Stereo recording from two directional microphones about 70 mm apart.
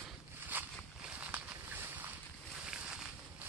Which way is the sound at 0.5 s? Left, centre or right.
Right.